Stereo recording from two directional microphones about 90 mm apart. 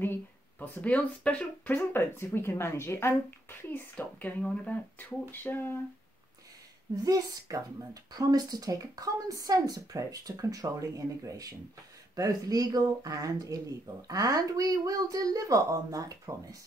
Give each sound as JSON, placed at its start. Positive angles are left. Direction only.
{"t": 0.0, "sound": "speech", "side_deg": 20}
{"t": 7.0, "sound": "a woman's voice", "side_deg": -40}